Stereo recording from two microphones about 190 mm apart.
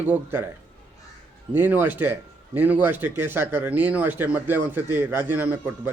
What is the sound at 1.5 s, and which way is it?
A man's voice, 10° right (ahead or behind).